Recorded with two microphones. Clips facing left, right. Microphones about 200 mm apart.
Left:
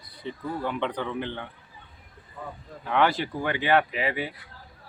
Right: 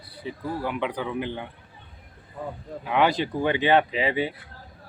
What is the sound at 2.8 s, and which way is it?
Speech, 15° right (ahead or behind).